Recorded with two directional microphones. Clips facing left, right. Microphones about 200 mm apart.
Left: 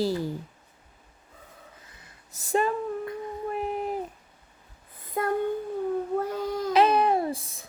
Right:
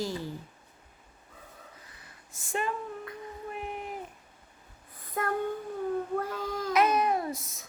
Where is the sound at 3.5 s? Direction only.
35° left (ahead or behind).